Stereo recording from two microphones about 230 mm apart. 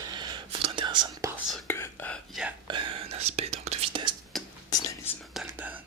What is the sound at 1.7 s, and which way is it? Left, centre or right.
Whispering, centre.